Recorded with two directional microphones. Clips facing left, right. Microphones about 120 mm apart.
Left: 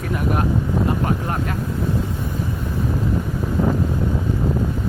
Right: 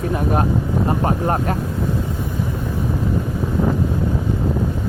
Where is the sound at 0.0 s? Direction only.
30° right (ahead or behind).